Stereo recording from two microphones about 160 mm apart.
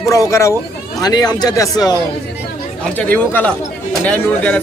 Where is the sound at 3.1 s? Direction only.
10° left (ahead or behind).